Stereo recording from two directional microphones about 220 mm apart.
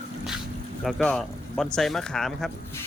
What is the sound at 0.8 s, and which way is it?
Speech, 5° left (ahead or behind).